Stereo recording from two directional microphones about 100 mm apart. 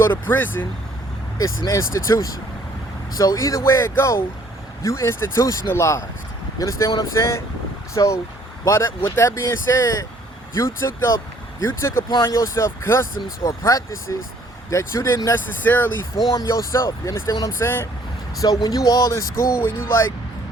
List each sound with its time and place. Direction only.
0.3 s speech: 20° left (ahead or behind)
1.4 s speech: 35° left (ahead or behind)
15.6 s speech: 20° left (ahead or behind)
16.3 s speech: 35° left (ahead or behind)
18.3 s speech: 40° left (ahead or behind)